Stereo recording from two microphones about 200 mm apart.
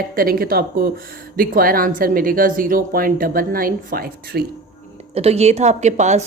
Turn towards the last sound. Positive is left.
turn(degrees=-35)  # may be behind; listen again after turning